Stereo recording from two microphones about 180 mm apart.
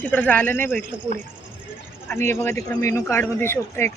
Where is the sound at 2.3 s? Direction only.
10° left (ahead or behind).